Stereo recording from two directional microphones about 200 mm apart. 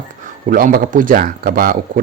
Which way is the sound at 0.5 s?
45° right (ahead or behind).